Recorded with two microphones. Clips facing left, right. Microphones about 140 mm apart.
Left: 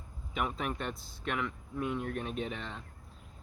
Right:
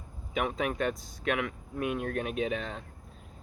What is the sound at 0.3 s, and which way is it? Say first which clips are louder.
Speech: right 5 dB; 80° right.